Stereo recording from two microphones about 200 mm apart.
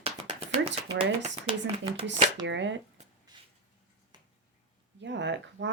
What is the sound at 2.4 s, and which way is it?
Speech, 65° right (ahead or behind).